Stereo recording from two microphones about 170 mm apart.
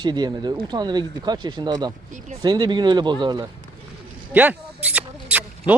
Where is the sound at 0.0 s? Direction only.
25° right (ahead or behind).